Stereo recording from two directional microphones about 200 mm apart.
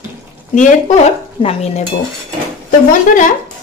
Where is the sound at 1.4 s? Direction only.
30° left (ahead or behind).